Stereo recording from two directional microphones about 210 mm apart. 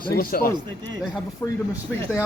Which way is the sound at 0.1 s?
45° left (ahead or behind).